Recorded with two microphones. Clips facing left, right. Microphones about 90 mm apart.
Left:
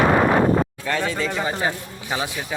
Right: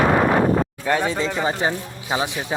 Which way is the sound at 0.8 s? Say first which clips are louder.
Right 3 dB; 20° right (ahead or behind).